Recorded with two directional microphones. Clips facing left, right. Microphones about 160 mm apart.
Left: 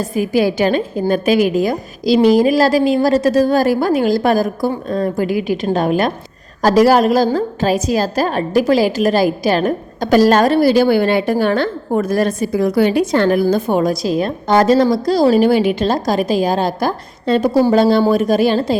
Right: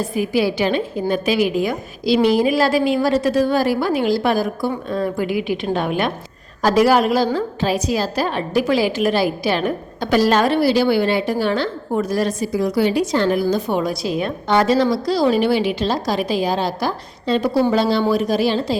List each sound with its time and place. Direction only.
0.0 s a woman's voice: 45° left (ahead or behind)